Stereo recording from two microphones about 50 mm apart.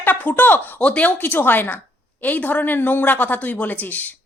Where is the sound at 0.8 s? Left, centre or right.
Left.